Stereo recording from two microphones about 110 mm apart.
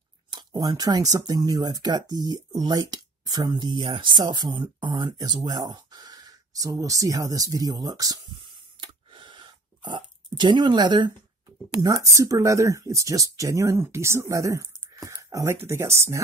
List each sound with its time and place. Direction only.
0.3 s speech: 40° right (ahead or behind)
9.1 s a sound: 45° right (ahead or behind)
11.8 s speech: 30° right (ahead or behind)